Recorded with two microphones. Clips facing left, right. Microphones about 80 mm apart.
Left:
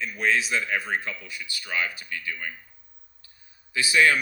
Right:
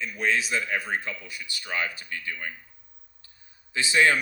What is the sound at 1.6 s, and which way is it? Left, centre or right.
Speech, right.